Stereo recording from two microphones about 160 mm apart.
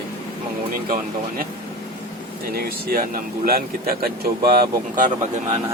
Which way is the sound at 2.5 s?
65° right (ahead or behind).